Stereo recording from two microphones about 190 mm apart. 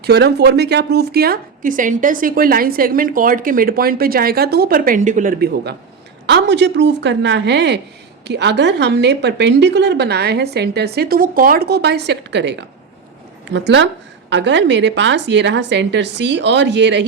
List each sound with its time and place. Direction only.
0.0 s a woman's voice: 60° right (ahead or behind)
6.2 s a woman's voice: 65° right (ahead or behind)